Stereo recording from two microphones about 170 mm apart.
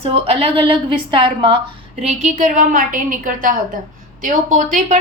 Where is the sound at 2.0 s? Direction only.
40° right (ahead or behind).